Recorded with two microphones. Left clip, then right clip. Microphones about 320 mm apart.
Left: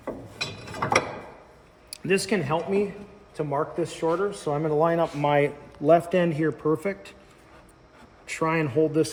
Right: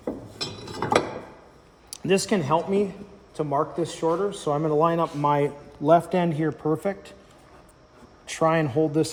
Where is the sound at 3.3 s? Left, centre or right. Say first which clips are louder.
Right 2 dB; centre.